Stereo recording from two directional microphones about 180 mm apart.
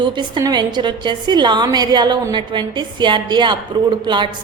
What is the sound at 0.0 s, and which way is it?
A woman's voice, 25° right (ahead or behind).